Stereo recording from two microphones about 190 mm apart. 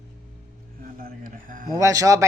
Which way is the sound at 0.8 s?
50° right (ahead or behind).